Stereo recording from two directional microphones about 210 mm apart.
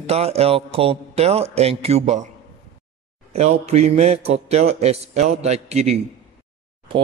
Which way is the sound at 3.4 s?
30° right (ahead or behind).